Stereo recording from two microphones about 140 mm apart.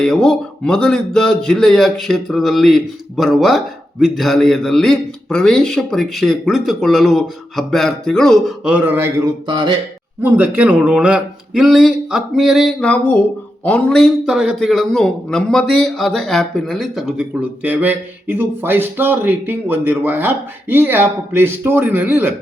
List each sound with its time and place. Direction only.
0.0 s a man's voice: 5° left (ahead or behind)
8.7 s a man's voice: 10° right (ahead or behind)